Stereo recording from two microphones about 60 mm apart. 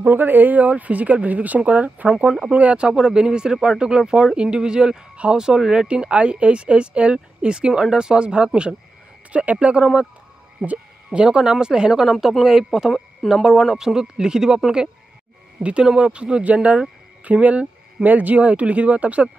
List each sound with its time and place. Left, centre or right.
0.0 s speech: right; by 12.9 s centre
12.9 s speech: centre
13.4 s speech: centre
15.6 s speech: centre